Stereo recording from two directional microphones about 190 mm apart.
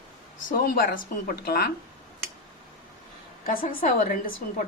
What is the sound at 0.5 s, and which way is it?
A woman's voice, 50° left (ahead or behind).